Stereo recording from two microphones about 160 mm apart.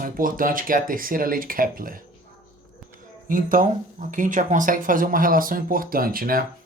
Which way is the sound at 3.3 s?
55° right (ahead or behind).